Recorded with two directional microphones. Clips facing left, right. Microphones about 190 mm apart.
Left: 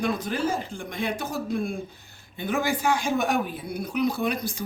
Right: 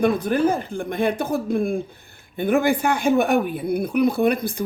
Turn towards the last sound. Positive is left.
turn(degrees=-55)  # may be behind; listen again after turning